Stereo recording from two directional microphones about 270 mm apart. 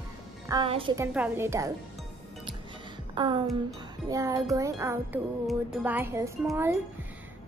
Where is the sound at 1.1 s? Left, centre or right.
Centre.